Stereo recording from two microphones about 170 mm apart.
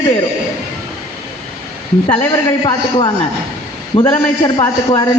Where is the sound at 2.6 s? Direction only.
25° left (ahead or behind).